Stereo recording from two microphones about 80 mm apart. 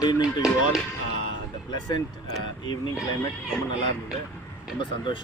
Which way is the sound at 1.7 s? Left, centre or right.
Left.